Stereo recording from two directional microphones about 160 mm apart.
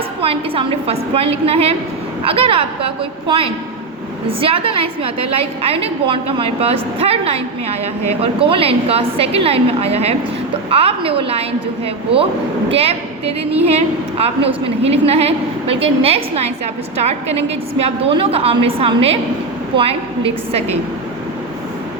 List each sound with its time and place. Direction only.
0.2 s a woman's voice: 35° right (ahead or behind)
12.7 s a woman's voice: 40° right (ahead or behind)